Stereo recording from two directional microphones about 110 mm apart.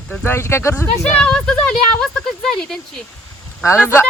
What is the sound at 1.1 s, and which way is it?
A woman's voice, 10° left (ahead or behind).